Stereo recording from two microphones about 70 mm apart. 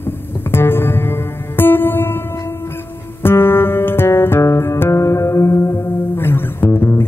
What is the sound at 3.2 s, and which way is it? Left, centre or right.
Music, left.